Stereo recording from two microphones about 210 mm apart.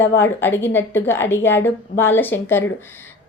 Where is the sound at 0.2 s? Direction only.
10° left (ahead or behind).